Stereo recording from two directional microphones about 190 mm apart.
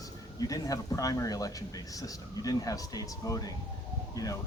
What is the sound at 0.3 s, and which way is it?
Speech, 20° left (ahead or behind).